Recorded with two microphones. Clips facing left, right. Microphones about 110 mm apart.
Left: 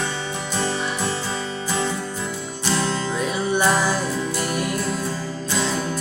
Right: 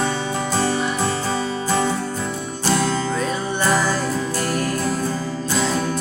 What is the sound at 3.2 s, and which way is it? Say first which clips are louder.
Music: left 1 dB; 15° left (ahead or behind).